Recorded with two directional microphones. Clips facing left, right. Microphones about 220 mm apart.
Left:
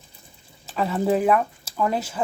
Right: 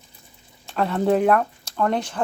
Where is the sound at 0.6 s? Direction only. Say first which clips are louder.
Right 2 dB; centre (ahead or behind).